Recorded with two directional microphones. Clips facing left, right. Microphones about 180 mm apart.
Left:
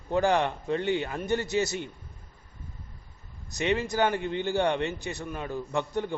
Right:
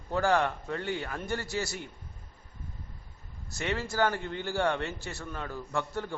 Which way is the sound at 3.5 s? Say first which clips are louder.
Left 6 dB; 20° left (ahead or behind).